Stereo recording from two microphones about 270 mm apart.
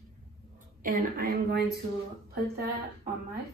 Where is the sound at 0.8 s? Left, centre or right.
Right.